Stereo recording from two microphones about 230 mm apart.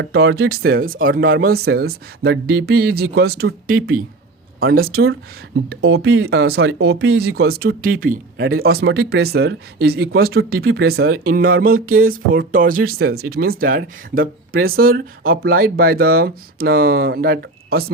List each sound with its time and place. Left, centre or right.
0.0 s speech: right